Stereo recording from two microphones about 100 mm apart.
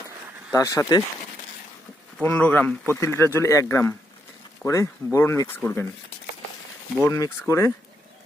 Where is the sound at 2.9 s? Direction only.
30° left (ahead or behind).